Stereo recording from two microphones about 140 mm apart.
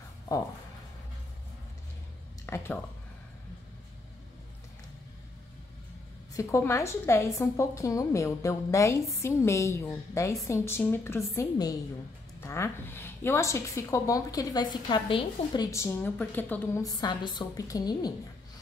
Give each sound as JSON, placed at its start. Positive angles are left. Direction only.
{"t": 2.4, "sound": "a sound", "side_deg": 20}
{"t": 6.3, "sound": "a woman's voice", "side_deg": 20}
{"t": 16.8, "sound": "a woman's voice", "side_deg": 30}